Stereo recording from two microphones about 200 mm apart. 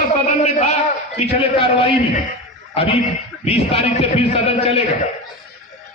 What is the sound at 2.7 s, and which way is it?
A man's voice, 30° left (ahead or behind).